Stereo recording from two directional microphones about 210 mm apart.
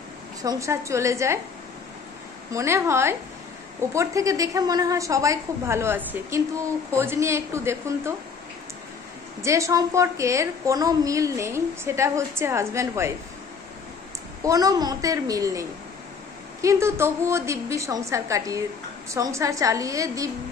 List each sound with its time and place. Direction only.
0.4 s a woman's voice: 15° right (ahead or behind)
2.5 s a woman's voice: 15° right (ahead or behind)
9.4 s a woman's voice: 15° right (ahead or behind)
14.4 s a woman's voice: 15° right (ahead or behind)
16.6 s a woman's voice: 10° right (ahead or behind)